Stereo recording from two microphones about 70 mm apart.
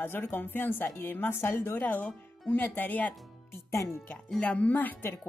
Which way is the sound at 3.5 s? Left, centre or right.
Left.